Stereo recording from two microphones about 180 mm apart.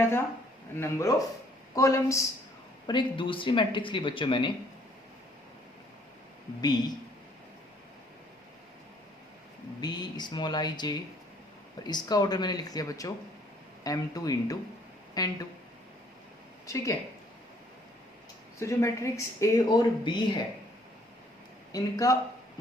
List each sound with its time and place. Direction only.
0.8 s speech: 15° left (ahead or behind)
2.8 s speech: 25° left (ahead or behind)
6.6 s speech: 20° left (ahead or behind)
9.8 s speech: 20° left (ahead or behind)
16.6 s speech: 15° left (ahead or behind)
18.6 s speech: 15° left (ahead or behind)
21.7 s speech: 20° left (ahead or behind)